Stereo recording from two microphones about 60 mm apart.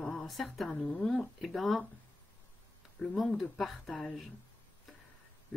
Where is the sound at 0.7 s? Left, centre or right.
Centre.